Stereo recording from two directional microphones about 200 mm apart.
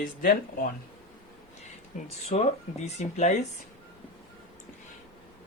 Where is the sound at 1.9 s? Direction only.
35° left (ahead or behind).